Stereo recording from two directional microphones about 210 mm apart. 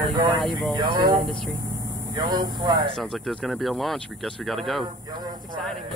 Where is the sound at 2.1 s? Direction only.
20° right (ahead or behind).